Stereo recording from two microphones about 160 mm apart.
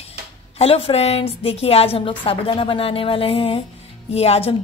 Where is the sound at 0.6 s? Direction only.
35° left (ahead or behind).